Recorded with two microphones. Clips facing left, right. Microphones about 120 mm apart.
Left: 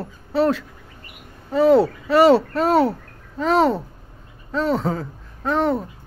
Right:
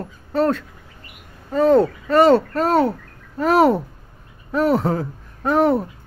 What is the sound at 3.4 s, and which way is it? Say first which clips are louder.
Speech: right 3 dB; 10° right (ahead or behind).